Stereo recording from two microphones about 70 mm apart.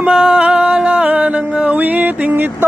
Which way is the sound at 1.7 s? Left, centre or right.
Right.